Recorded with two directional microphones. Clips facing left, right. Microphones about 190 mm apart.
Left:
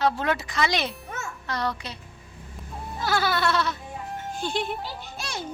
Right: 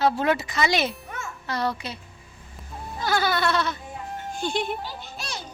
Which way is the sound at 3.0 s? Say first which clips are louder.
Right 1 dB; centre (ahead or behind).